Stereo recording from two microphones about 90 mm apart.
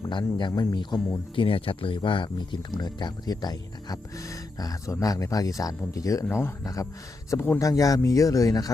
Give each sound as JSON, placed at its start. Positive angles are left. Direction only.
{"t": 0.0, "sound": "speech", "side_deg": 60}
{"t": 1.4, "sound": "speech", "side_deg": 90}
{"t": 7.3, "sound": "speech", "side_deg": 30}
{"t": 7.6, "sound": "speech", "side_deg": 40}